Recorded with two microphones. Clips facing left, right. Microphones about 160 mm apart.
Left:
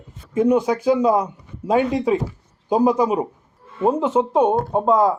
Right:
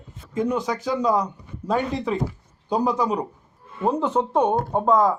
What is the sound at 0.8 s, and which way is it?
Speech, 25° left (ahead or behind).